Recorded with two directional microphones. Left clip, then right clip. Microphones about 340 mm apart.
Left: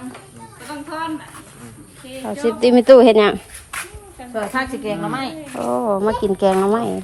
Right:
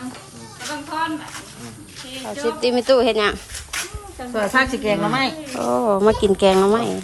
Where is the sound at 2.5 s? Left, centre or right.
Centre.